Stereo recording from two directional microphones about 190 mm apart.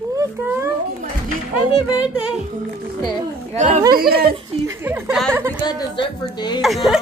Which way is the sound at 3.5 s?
40° right (ahead or behind).